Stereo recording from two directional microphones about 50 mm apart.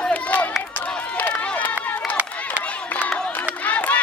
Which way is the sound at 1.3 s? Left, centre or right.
Left.